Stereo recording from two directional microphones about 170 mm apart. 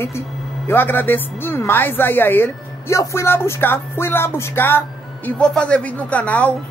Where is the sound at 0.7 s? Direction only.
10° left (ahead or behind).